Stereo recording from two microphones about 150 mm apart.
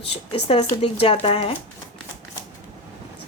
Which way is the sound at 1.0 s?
40° left (ahead or behind).